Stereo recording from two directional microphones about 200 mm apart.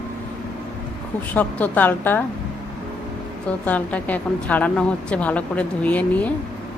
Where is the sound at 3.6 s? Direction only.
10° left (ahead or behind).